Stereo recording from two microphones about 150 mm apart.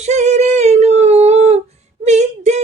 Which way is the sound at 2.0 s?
50° right (ahead or behind).